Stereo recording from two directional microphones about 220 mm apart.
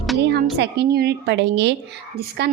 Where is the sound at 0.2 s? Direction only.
50° right (ahead or behind).